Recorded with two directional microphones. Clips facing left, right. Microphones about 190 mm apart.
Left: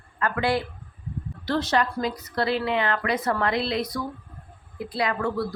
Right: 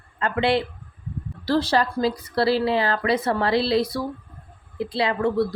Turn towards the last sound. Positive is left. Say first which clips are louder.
# right 4 dB
turn(degrees=-25)  # may be behind; listen again after turning